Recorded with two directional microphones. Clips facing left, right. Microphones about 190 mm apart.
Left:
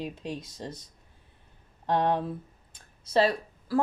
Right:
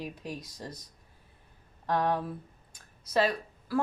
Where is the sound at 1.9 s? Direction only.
25° left (ahead or behind).